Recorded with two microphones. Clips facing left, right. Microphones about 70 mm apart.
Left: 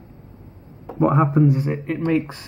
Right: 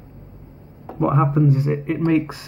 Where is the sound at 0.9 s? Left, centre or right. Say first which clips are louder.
Left 1 dB; centre.